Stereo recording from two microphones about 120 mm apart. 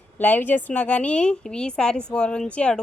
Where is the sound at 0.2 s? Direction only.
15° left (ahead or behind).